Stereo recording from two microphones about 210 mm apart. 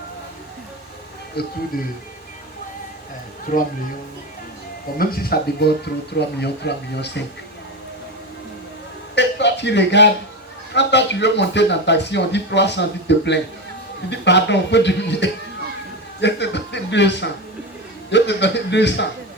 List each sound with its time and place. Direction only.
1.4 s speech: 50° left (ahead or behind)
3.5 s speech: 40° left (ahead or behind)
4.9 s speech: 45° left (ahead or behind)
9.1 s a sound: 55° left (ahead or behind)
10.8 s speech: 55° left (ahead or behind)